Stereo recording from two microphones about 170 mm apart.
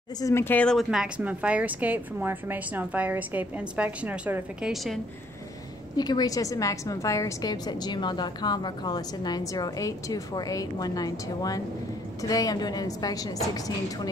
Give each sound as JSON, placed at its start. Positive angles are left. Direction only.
{"t": 0.2, "sound": "speech", "side_deg": 15}
{"t": 5.9, "sound": "a woman's voice", "side_deg": 25}